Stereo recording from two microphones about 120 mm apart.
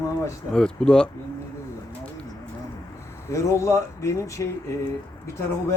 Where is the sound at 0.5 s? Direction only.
5° left (ahead or behind).